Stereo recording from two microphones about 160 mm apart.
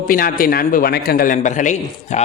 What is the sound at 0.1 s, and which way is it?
A man's voice, 65° left (ahead or behind).